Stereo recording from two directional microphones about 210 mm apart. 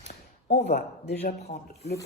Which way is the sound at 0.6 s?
45° left (ahead or behind).